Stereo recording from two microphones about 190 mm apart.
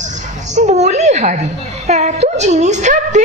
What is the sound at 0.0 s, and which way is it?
A woman's voice, 40° right (ahead or behind).